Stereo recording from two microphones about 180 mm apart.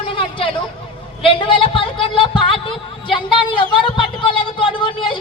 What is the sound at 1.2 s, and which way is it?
A man's voice, 25° left (ahead or behind).